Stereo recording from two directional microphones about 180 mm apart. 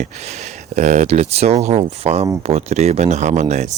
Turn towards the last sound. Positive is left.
turn(degrees=-40)  # may be behind; listen again after turning